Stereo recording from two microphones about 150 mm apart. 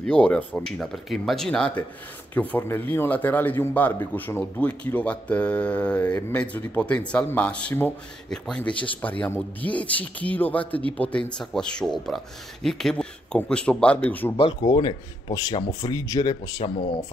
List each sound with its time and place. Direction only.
0.0 s a man's voice: 5° left (ahead or behind)
14.3 s speech: 35° left (ahead or behind)